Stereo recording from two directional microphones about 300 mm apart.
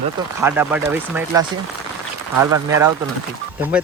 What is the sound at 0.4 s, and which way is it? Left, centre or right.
Speech, centre.